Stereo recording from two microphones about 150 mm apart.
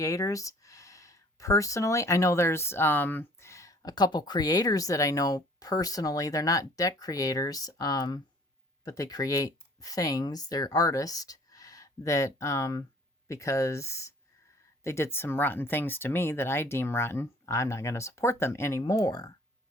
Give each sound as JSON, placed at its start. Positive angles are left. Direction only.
{"t": 0.0, "sound": "speech", "side_deg": 20}